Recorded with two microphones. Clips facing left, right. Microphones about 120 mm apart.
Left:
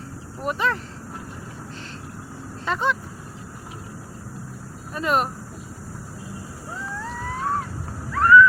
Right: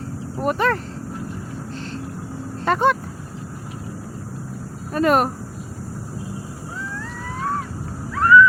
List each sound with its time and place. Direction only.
0.3 s speech: 50° right (ahead or behind)
2.6 s vehicle: 55° right (ahead or behind)
4.9 s speech: 50° right (ahead or behind)
8.1 s ocean: centre (ahead or behind)